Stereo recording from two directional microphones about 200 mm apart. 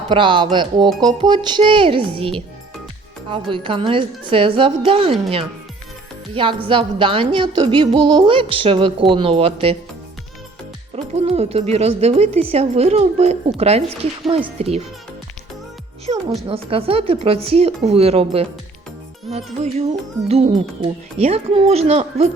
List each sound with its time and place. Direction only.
0.1 s a woman's voice: 25° right (ahead or behind)
6.3 s a woman's voice: 25° right (ahead or behind)
10.9 s a woman's voice: 30° right (ahead or behind)
16.3 s a woman's voice: 30° right (ahead or behind)